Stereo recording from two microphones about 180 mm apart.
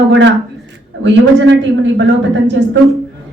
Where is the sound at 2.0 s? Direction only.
80° right.